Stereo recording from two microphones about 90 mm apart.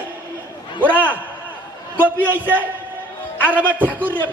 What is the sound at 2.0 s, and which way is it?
Speech, 20° right (ahead or behind).